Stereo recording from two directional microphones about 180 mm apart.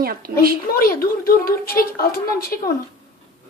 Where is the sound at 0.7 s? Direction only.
55° left (ahead or behind).